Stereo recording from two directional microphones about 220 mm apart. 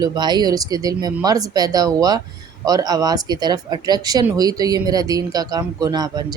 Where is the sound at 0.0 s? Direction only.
20° right (ahead or behind).